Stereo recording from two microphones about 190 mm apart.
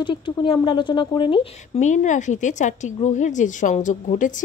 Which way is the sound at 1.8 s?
40° left (ahead or behind).